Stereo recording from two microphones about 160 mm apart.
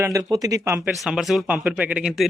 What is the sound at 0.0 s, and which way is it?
Speech, 20° right (ahead or behind).